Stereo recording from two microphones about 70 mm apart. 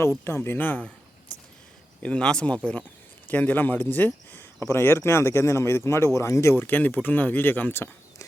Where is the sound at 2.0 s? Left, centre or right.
Centre; by 6.6 s left.